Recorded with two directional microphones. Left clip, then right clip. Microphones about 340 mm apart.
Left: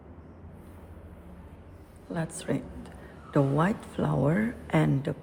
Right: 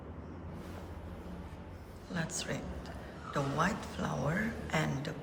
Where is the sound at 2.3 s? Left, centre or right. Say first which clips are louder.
Left 5 dB; centre.